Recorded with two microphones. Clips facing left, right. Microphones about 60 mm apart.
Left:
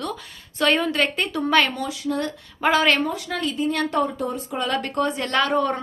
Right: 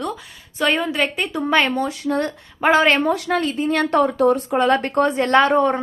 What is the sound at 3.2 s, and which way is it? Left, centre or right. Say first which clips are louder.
Speech: right 4 dB; right.